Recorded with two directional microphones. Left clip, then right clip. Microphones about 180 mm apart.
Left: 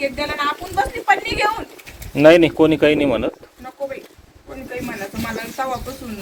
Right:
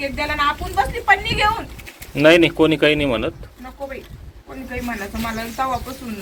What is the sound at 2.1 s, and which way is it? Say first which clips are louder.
Speech: left 2 dB; 15° left (ahead or behind).